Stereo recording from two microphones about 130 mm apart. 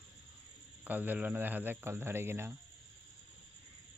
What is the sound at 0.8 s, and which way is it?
Speech, 15° right (ahead or behind).